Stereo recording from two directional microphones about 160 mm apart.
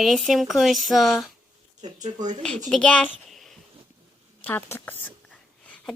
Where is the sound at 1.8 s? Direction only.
50° right (ahead or behind).